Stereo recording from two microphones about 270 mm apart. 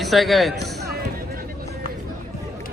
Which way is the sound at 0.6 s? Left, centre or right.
Right.